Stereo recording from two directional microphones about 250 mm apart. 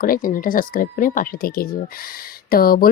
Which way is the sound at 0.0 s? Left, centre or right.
Left.